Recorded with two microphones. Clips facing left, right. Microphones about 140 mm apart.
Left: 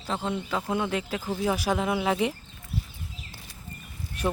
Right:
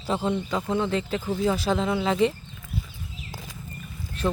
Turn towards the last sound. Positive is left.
turn(degrees=15)  # may be behind; listen again after turning